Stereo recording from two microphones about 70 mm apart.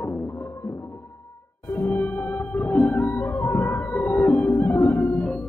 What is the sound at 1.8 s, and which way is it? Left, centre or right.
Music, left.